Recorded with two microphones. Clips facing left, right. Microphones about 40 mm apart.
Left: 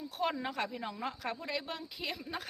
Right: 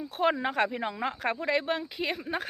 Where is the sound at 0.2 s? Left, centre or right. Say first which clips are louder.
Right 8 dB; right.